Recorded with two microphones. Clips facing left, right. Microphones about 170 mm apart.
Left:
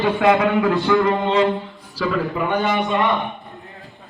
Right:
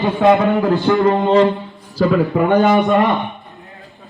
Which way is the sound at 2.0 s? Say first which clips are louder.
Right 7 dB; 45° right (ahead or behind).